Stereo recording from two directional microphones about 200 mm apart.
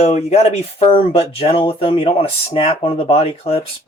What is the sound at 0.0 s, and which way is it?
Speech, 35° left (ahead or behind).